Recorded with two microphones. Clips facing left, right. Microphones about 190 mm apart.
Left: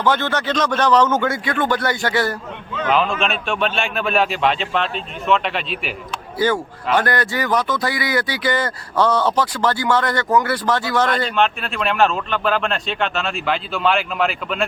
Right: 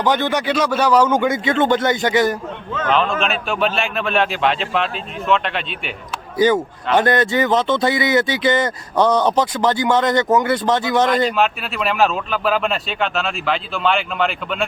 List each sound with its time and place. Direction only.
0.0 s speech: 15° right (ahead or behind)
2.8 s speech: 5° left (ahead or behind)
6.4 s speech: 20° right (ahead or behind)
11.3 s speech: 5° right (ahead or behind)